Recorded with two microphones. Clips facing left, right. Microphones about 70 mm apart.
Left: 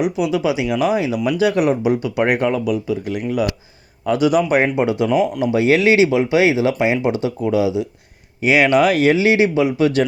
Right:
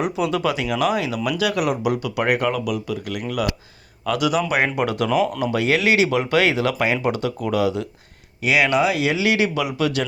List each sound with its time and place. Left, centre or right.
0.0 s speech: centre
5.0 s speech: centre
8.4 s speech: left
8.8 s speech: left